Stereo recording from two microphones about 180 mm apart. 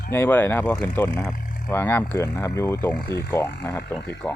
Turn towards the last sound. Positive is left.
turn(degrees=0)  # may be behind; listen again after turning